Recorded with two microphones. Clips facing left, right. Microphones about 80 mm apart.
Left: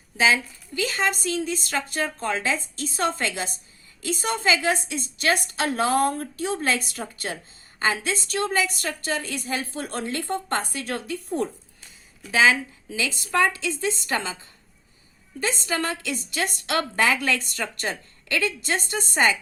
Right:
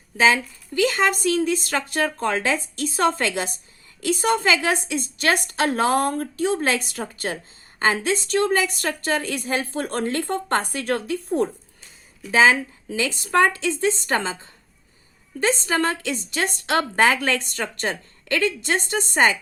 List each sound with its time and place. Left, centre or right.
0.8 s a woman's voice: right
15.4 s a woman's voice: right